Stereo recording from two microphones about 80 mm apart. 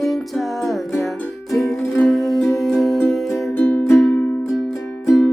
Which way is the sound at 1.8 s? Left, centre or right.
Left.